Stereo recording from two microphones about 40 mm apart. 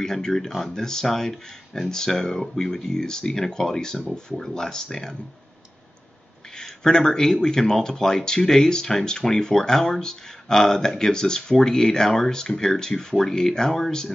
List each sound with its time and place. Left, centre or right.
0.0 s speech: centre
6.6 s speech: centre